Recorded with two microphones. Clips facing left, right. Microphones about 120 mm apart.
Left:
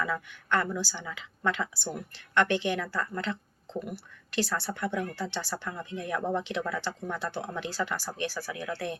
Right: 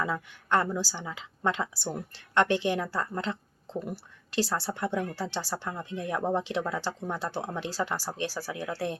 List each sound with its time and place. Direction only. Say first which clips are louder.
0.0 s speech: right 1 dB; 30° right (ahead or behind)